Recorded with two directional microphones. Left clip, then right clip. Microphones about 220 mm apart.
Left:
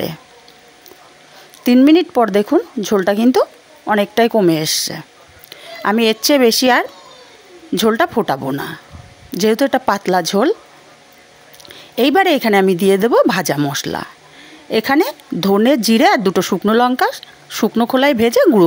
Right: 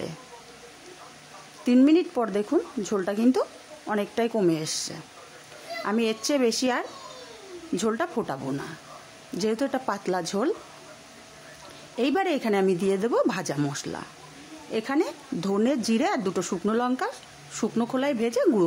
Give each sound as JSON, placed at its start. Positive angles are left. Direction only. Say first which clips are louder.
{"t": 1.6, "sound": "speech", "louder": "left 10 dB", "side_deg": 35}
{"t": 11.9, "sound": "speech", "louder": "left 12 dB", "side_deg": 35}